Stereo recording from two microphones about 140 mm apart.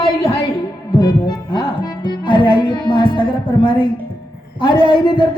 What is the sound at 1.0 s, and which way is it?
Heart sounds, 30° left (ahead or behind).